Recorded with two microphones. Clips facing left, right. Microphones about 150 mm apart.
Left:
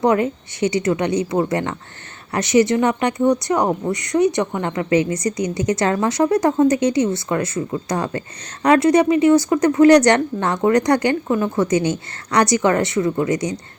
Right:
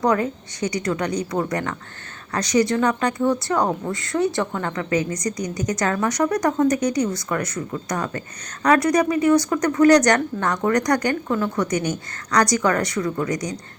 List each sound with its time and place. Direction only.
0.0 s a woman's voice: 25° left (ahead or behind)